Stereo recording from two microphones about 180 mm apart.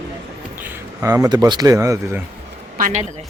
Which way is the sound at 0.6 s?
20° right (ahead or behind).